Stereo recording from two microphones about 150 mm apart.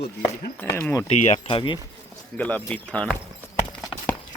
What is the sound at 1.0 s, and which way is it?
Speech, 45° left (ahead or behind).